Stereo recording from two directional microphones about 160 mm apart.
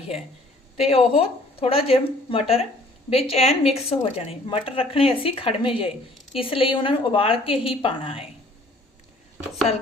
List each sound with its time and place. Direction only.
0.8 s a woman's voice: 40° left (ahead or behind)